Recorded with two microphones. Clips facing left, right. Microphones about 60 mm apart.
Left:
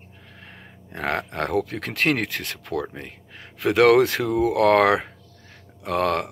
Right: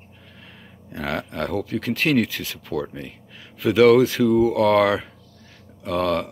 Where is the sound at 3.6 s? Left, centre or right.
Left.